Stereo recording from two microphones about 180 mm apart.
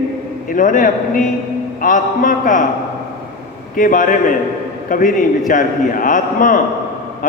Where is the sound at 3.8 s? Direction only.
50° left (ahead or behind).